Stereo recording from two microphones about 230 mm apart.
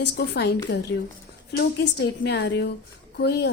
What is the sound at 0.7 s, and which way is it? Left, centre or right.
A woman's voice, left.